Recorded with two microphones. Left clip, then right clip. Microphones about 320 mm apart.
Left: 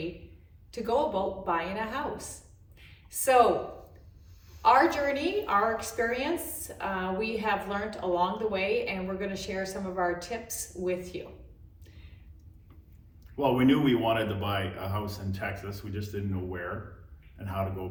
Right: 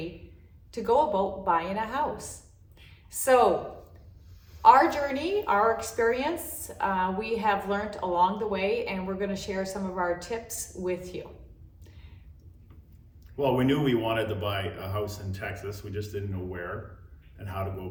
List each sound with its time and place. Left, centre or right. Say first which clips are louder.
0.7 s a woman's voice: right 4 dB; centre
4.6 s a woman's voice: right 3 dB; centre
13.3 s a man's voice: even; centre